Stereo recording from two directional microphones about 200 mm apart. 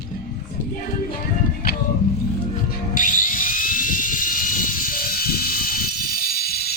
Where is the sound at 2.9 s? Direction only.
40° left (ahead or behind).